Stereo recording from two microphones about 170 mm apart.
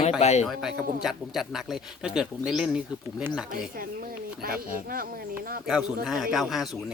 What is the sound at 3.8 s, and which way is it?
Speech, 60° right (ahead or behind).